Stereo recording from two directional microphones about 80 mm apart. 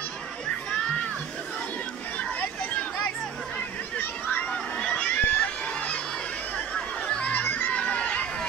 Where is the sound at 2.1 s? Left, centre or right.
Centre.